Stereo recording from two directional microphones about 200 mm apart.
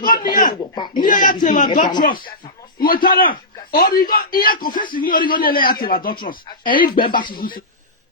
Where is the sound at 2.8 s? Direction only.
45° left (ahead or behind).